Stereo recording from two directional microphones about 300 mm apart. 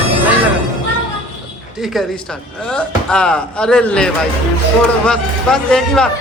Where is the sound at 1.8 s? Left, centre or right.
Centre.